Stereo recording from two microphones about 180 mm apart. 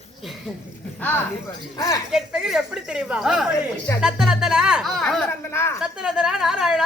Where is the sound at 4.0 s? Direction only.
5° right (ahead or behind).